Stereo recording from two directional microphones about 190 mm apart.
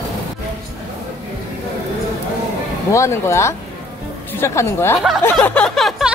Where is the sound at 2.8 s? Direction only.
15° left (ahead or behind).